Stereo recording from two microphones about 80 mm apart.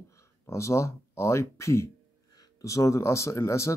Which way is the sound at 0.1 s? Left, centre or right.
Left.